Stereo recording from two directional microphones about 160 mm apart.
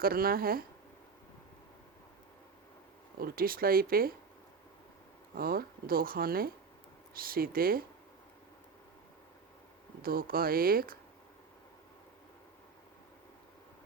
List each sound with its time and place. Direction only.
0.0 s speech: 65° right (ahead or behind)
3.2 s speech: 65° right (ahead or behind)
5.3 s speech: 70° right (ahead or behind)
10.0 s speech: 65° right (ahead or behind)